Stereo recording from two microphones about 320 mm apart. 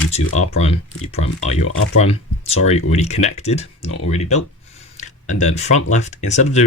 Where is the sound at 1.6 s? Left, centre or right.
Left.